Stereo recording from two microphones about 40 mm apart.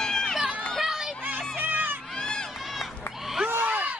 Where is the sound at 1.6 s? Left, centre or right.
Right.